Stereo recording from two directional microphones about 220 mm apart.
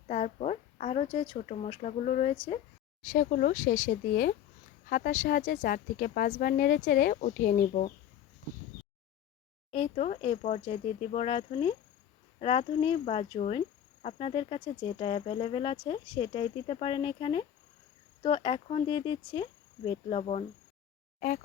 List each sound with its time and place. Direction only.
0.1 s a woman's voice: 30° left (ahead or behind)
9.7 s speech: 30° left (ahead or behind)
21.2 s speech: 40° left (ahead or behind)